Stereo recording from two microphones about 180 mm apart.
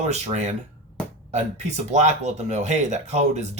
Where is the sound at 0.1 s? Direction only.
40° right (ahead or behind).